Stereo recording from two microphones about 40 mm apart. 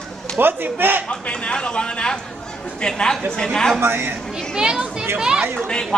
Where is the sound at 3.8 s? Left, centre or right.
Right.